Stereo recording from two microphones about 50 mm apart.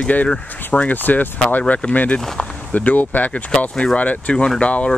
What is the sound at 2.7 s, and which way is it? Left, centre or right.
Speech, left.